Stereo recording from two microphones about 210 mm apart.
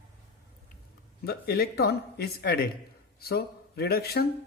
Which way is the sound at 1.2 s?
50° left (ahead or behind).